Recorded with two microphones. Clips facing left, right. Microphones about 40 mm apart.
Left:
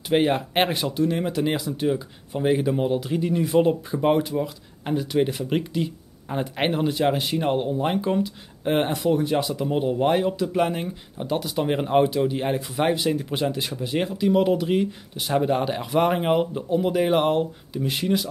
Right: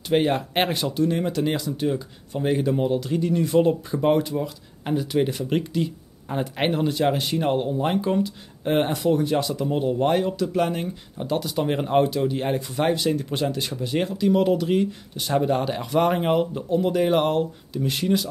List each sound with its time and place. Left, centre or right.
0.1 s speech: centre